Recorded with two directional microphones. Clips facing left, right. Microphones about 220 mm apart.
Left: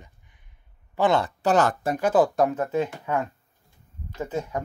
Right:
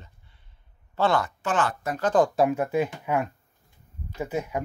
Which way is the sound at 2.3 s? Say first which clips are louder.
Even; 5° right (ahead or behind).